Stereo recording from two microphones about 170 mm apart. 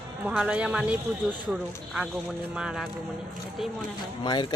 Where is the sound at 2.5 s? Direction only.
5° right (ahead or behind).